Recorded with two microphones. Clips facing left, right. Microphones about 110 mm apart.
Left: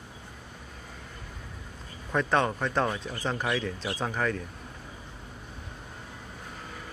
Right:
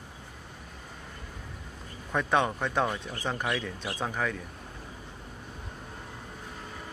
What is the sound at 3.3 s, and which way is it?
Speech, 5° left (ahead or behind).